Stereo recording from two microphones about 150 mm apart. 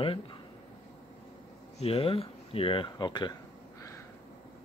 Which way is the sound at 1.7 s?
40° left (ahead or behind).